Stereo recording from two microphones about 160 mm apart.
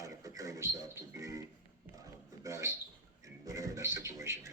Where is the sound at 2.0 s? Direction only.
20° right (ahead or behind).